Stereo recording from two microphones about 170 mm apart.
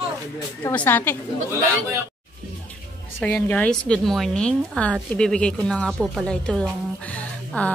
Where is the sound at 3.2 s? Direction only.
5° left (ahead or behind).